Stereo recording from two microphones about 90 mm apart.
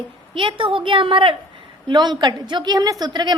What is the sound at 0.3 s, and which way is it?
A woman's voice, 70° right (ahead or behind).